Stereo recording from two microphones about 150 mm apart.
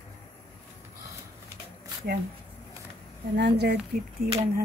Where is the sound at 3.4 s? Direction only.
90° right.